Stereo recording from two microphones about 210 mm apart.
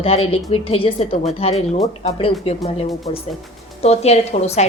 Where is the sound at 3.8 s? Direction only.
30° left (ahead or behind).